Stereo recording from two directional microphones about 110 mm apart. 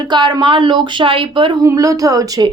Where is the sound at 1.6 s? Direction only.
30° right (ahead or behind).